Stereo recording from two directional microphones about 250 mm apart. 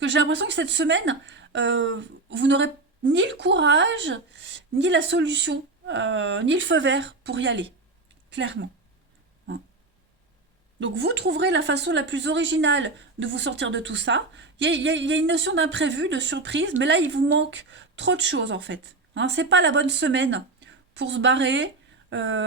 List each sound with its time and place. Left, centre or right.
0.0 s speech: right
10.8 s speech: right